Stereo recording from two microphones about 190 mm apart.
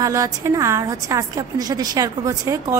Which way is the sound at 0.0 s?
15° right (ahead or behind).